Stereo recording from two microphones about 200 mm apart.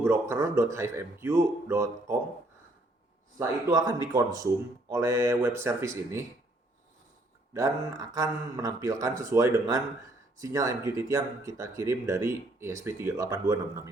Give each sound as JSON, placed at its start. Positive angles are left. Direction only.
{"t": 0.0, "sound": "speech", "side_deg": -15}
{"t": 3.3, "sound": "speech", "side_deg": -15}
{"t": 7.5, "sound": "speech", "side_deg": -15}